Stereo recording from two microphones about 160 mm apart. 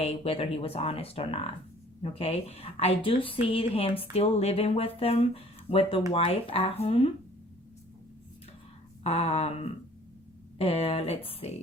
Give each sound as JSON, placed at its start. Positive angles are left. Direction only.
{"t": 0.0, "sound": "speech", "side_deg": 40}
{"t": 9.0, "sound": "speech", "side_deg": 40}